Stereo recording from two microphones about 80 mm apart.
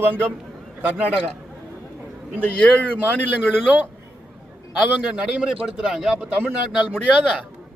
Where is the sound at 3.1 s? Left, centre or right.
Left.